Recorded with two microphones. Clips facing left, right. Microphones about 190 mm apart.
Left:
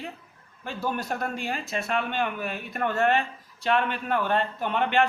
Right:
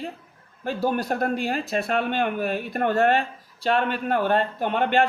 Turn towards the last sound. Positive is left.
turn(degrees=-40)  # may be behind; listen again after turning